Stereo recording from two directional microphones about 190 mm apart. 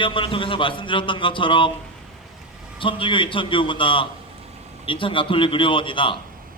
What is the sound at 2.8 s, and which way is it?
A man's voice, 25° left (ahead or behind).